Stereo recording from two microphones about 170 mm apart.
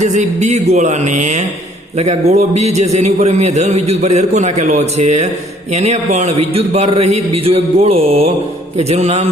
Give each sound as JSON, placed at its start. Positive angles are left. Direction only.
{"t": 0.0, "sound": "a man's voice", "side_deg": -40}